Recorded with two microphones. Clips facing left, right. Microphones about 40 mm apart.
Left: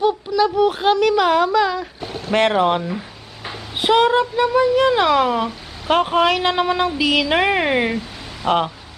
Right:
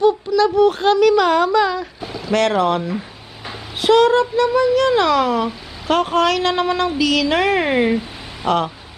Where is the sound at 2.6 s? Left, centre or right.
Centre.